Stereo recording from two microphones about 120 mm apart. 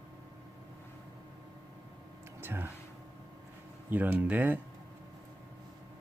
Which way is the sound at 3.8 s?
15° right (ahead or behind).